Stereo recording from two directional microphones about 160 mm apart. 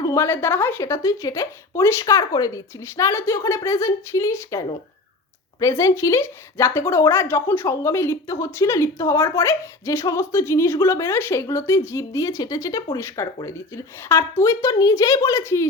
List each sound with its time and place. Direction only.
0.0 s speech: 15° left (ahead or behind)